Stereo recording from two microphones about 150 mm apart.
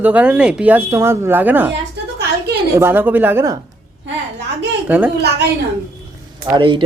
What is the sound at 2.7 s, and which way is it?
Speech, 15° right (ahead or behind).